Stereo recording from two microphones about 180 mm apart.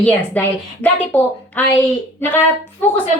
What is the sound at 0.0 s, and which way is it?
A woman's voice, 5° left (ahead or behind).